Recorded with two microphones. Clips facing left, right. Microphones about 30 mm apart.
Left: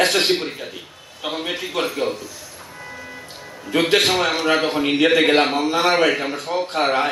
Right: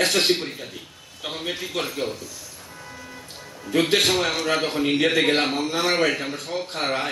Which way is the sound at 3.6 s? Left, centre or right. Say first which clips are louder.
Left 3 dB; centre.